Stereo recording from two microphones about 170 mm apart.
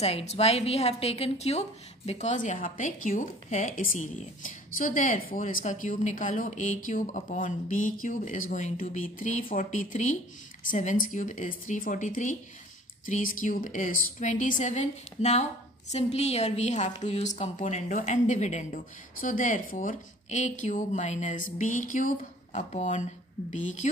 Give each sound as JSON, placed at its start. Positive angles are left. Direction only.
{"t": 0.0, "sound": "a woman's voice", "side_deg": 40}